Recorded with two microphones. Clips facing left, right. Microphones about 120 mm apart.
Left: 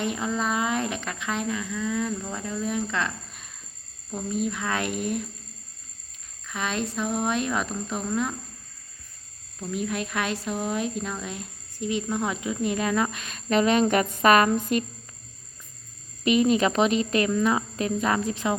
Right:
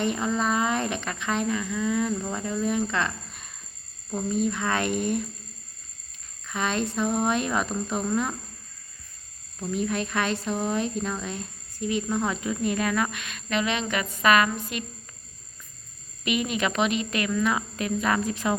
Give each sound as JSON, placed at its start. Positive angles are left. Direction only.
{"t": 0.0, "sound": "speech", "side_deg": 5}
{"t": 6.5, "sound": "speech", "side_deg": 0}
{"t": 9.7, "sound": "speech", "side_deg": 5}
{"t": 11.8, "sound": "speech", "side_deg": 20}
{"t": 16.2, "sound": "speech", "side_deg": 35}